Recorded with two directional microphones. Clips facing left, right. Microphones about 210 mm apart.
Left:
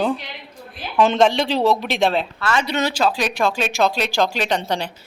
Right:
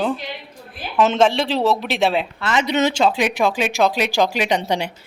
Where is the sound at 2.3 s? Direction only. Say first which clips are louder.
Right 2 dB; 20° right (ahead or behind).